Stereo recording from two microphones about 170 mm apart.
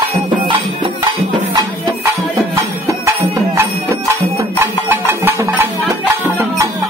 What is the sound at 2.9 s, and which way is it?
Music, 15° right (ahead or behind).